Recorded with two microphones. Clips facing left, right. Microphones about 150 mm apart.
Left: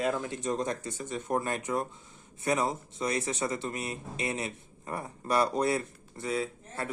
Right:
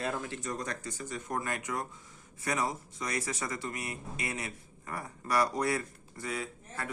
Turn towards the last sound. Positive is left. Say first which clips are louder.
# left 4 dB
turn(degrees=25)  # may be behind; listen again after turning